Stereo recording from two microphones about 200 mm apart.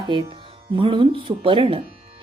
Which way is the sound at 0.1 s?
25° right (ahead or behind).